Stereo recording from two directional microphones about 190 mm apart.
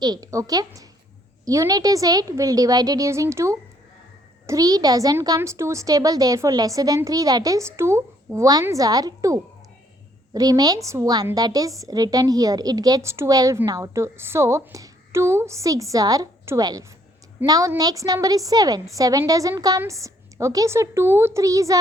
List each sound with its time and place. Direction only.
0.0 s a woman's voice: 20° right (ahead or behind)